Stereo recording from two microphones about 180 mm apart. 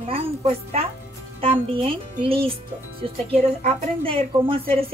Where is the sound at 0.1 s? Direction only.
35° right (ahead or behind).